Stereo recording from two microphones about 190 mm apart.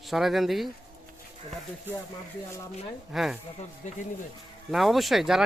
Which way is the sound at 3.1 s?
Centre (ahead or behind).